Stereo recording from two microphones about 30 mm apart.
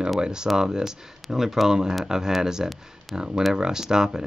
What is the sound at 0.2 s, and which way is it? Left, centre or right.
Speech, right.